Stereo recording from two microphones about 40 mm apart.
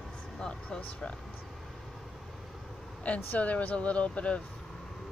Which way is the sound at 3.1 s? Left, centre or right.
Left.